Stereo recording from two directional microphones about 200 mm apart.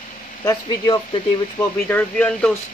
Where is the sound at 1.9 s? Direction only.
5° left (ahead or behind).